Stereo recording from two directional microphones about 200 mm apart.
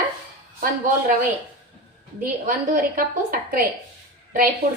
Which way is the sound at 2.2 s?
45° right (ahead or behind).